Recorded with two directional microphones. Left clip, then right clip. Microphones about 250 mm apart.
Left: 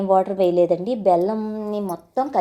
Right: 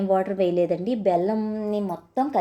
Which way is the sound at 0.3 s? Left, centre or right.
Centre.